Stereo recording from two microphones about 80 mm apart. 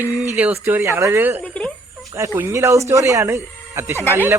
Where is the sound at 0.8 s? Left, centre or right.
Right.